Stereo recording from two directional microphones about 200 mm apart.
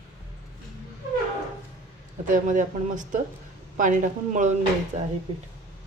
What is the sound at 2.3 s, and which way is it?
Speech, 40° right (ahead or behind).